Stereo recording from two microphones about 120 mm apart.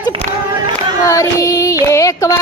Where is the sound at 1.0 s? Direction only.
25° left (ahead or behind).